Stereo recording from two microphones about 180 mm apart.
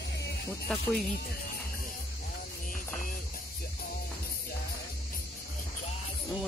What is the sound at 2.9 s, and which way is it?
Music, 50° left (ahead or behind).